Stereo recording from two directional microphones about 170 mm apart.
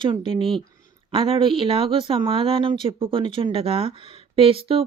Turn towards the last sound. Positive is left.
turn(degrees=-35)  # may be behind; listen again after turning